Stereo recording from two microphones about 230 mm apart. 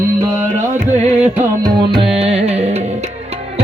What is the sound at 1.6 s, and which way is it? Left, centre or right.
Music, right.